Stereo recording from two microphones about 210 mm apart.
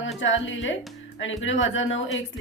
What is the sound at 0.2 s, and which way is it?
Speech, 65° left (ahead or behind).